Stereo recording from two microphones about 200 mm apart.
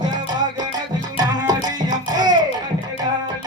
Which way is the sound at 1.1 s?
20° right (ahead or behind).